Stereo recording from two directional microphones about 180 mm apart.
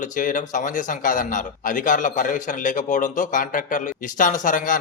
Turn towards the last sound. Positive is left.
turn(degrees=45)  # may be behind; listen again after turning